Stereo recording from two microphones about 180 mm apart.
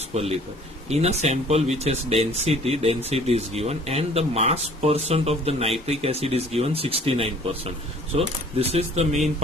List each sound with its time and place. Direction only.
0.1 s a man's voice: 35° right (ahead or behind)